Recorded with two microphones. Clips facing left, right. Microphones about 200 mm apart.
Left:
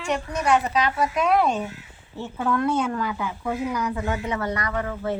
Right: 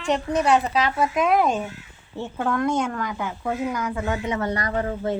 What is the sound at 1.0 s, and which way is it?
Speech, 20° right (ahead or behind).